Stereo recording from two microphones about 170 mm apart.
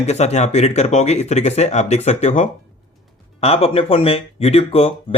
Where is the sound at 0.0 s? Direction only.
40° left (ahead or behind).